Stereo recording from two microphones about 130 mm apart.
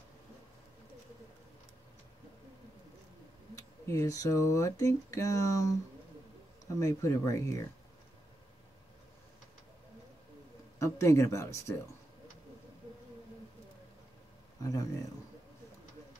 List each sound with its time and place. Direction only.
3.8 s speech: 25° left (ahead or behind)
6.8 s speech: 25° left (ahead or behind)
10.8 s speech: 25° left (ahead or behind)
14.6 s speech: 25° left (ahead or behind)